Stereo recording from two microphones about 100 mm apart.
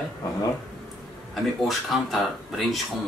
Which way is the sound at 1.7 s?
Centre (ahead or behind).